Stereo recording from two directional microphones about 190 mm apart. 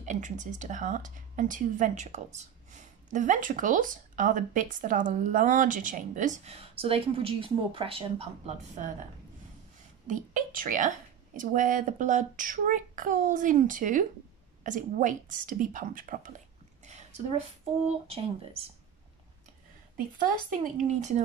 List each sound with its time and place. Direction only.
0.0 s a woman's voice: 40° right (ahead or behind)
10.0 s a child's voice: 45° right (ahead or behind)
17.8 s a woman's voice: 30° right (ahead or behind)
20.2 s a child's voice: 45° right (ahead or behind)